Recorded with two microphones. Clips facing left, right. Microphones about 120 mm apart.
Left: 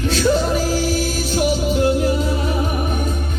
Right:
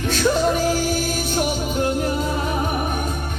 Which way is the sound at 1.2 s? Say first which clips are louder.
Left 3 dB; 45° right (ahead or behind).